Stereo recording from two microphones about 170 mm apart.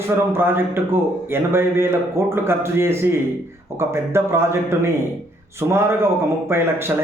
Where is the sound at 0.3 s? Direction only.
15° right (ahead or behind).